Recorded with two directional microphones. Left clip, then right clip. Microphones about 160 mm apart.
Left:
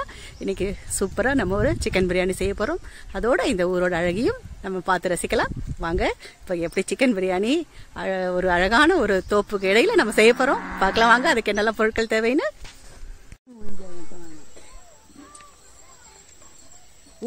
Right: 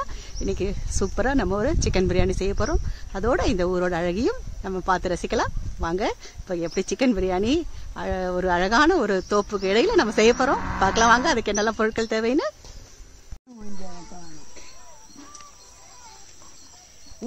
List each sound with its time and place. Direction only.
0.0 s speech: 15° left (ahead or behind)